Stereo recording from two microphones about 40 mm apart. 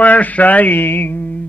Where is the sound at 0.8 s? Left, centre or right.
Left.